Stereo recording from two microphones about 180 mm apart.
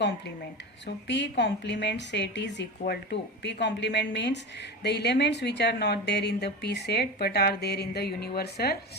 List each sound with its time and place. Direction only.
0.9 s speech: 75° left (ahead or behind); by 8.8 s 60° left (ahead or behind)